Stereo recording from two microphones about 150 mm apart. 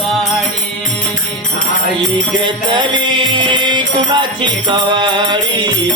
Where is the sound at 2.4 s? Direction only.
30° right (ahead or behind).